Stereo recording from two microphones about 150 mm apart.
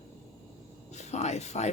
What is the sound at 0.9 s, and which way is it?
Speech, 50° left (ahead or behind).